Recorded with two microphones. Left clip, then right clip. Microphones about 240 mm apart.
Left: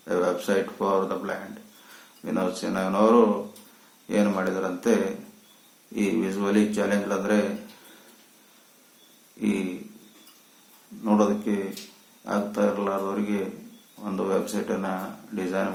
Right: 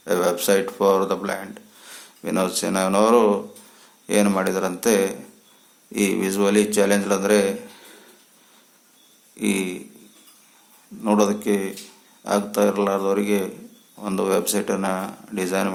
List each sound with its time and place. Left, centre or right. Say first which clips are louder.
0.0 s a man's voice: right 4 dB; right
9.4 s a sound: right 4 dB; right
11.0 s a man's voice: right 4 dB; right